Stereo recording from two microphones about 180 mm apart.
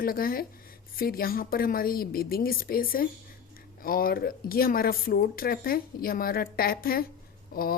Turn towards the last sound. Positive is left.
turn(degrees=55)  # may be behind; listen again after turning